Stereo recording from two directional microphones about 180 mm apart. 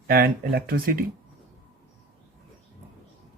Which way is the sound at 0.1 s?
55° right (ahead or behind).